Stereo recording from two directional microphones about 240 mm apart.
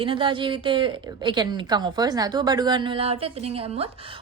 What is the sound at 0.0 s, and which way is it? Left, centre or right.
A woman's voice, right.